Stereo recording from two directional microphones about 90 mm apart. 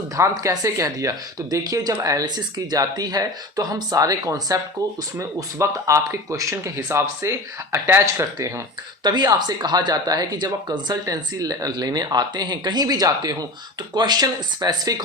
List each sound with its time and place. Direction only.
0.2 s speech: 40° right (ahead or behind)
9.0 s speech: 50° right (ahead or behind)